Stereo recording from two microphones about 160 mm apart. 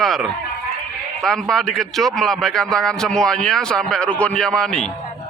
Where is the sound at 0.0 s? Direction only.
Centre (ahead or behind).